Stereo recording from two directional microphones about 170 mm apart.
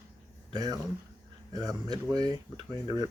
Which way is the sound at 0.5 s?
20° right (ahead or behind).